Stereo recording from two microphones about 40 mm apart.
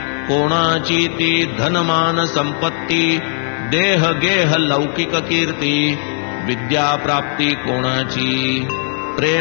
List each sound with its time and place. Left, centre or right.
0.3 s a man's voice: centre
0.9 s mantra: centre
1.3 s mantra: right
3.7 s a man's voice: centre; by 5.9 s right
6.7 s mantra: centre